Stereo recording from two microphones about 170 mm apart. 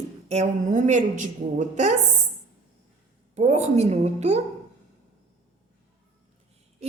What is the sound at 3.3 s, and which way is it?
A woman's voice, 40° right (ahead or behind).